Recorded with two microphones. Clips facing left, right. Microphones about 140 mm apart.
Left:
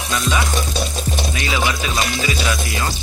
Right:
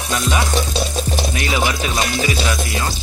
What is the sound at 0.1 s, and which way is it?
Music, 20° right (ahead or behind).